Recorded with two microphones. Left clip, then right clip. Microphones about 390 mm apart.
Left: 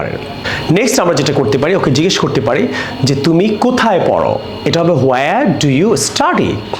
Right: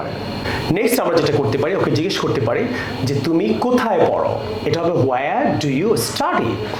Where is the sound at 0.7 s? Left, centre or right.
Left.